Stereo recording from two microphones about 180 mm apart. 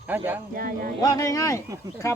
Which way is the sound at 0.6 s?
50° right (ahead or behind).